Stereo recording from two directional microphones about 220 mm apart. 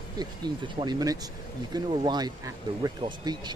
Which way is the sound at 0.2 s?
20° right (ahead or behind).